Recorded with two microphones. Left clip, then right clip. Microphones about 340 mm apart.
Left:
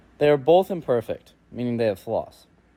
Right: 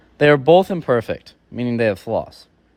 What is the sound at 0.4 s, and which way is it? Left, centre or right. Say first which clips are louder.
Speech: right 5 dB; right.